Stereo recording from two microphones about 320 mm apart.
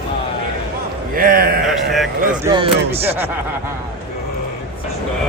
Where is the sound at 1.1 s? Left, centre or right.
Right.